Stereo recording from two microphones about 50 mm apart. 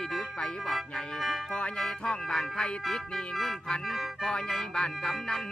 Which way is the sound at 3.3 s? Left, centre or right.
Centre.